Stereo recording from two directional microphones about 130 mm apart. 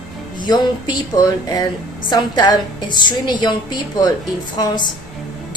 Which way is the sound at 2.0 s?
35° left (ahead or behind).